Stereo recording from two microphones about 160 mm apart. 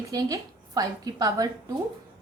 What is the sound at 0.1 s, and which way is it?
A woman's voice, 20° right (ahead or behind).